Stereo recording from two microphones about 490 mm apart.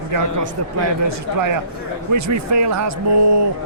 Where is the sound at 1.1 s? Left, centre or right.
Right.